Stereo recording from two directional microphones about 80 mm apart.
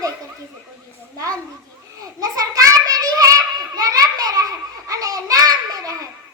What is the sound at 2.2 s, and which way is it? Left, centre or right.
A child's voice, right.